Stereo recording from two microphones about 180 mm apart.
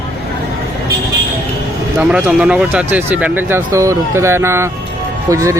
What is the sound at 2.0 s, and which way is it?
Speech, 5° right (ahead or behind).